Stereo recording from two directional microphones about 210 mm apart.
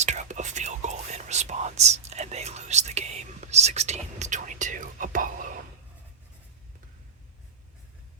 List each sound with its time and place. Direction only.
0.0 s whispering: 35° right (ahead or behind)